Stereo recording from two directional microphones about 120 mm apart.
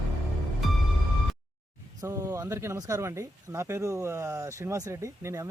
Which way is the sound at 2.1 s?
25° right (ahead or behind).